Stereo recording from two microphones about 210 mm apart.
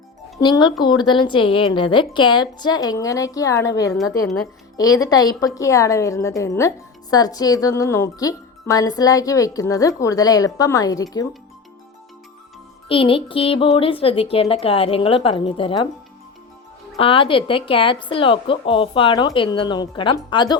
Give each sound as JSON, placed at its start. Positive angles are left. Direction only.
{"t": 0.3, "sound": "speech", "side_deg": 20}
{"t": 4.8, "sound": "speech", "side_deg": 15}
{"t": 12.9, "sound": "speech", "side_deg": 25}
{"t": 17.0, "sound": "speech", "side_deg": 25}